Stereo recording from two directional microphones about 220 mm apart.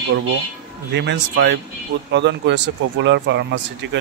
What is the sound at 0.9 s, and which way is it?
Speech, 50° right (ahead or behind).